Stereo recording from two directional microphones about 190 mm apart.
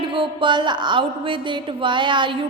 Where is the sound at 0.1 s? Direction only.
25° right (ahead or behind).